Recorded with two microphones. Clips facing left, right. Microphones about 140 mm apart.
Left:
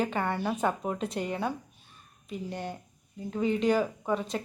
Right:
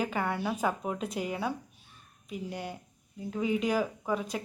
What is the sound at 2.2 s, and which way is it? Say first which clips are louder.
Speech: left 2 dB; 10° right (ahead or behind).